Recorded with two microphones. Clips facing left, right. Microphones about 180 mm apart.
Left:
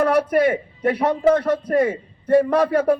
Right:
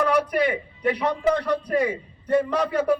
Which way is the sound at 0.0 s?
55° left (ahead or behind).